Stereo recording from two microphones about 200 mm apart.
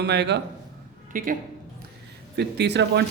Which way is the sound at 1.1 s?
45° right (ahead or behind).